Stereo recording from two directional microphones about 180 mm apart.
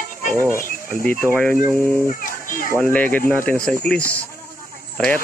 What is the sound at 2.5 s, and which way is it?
Speech, 50° left (ahead or behind).